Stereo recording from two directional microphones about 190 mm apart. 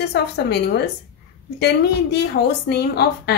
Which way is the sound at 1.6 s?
60° left (ahead or behind).